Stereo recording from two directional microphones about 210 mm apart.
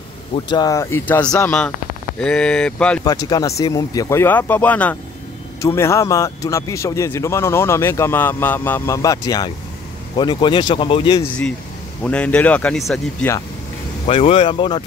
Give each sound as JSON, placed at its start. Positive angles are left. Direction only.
{"t": 0.5, "sound": "speech", "side_deg": 20}
{"t": 3.0, "sound": "speech", "side_deg": 20}
{"t": 12.0, "sound": "speech", "side_deg": 5}
{"t": 14.0, "sound": "speech", "side_deg": 25}